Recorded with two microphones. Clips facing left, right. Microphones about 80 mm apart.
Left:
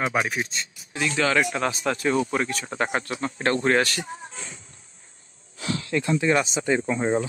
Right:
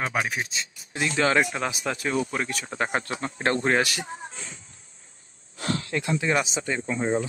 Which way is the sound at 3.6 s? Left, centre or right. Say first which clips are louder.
Left 3 dB; centre.